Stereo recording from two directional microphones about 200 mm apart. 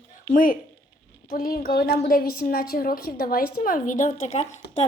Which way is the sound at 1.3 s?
45° left (ahead or behind).